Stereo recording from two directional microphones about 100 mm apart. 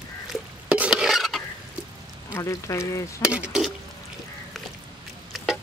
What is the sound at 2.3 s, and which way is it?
Stir, 30° left (ahead or behind).